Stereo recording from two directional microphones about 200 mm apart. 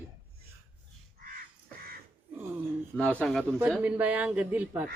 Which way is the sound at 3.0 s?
5° left (ahead or behind).